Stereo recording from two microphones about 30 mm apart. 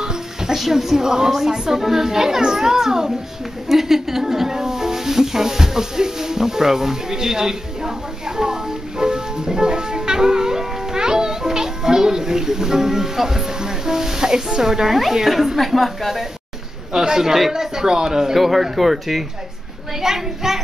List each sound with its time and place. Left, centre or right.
0.0 s music: right
0.6 s speech: centre
8.4 s music: right
15.2 s a woman's voice: centre
16.9 s a man's voice: right
18.3 s speech: centre